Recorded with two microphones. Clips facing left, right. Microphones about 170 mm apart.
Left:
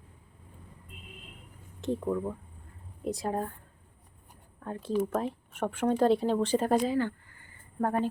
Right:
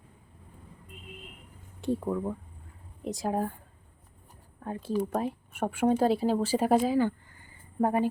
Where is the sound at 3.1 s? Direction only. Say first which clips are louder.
Right 2 dB; 5° right (ahead or behind).